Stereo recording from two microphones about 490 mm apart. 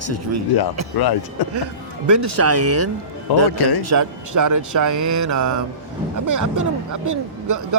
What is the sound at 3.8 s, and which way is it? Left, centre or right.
Speech, right.